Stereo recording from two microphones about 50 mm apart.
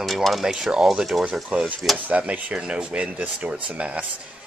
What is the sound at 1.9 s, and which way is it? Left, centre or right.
Speech, right.